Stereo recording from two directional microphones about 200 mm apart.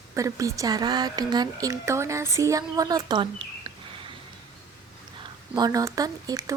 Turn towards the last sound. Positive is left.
turn(degrees=-15)  # may be behind; listen again after turning